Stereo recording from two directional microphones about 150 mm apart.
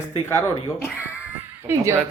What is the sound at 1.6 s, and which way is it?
Speech, 15° right (ahead or behind).